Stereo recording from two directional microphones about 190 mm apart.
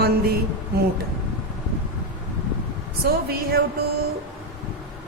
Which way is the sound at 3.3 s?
55° right (ahead or behind).